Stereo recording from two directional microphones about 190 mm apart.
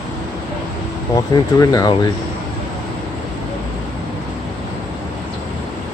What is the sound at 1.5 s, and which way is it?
Speech, 20° left (ahead or behind).